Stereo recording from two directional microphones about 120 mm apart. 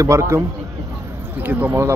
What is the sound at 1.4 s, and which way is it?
Speech, 15° right (ahead or behind).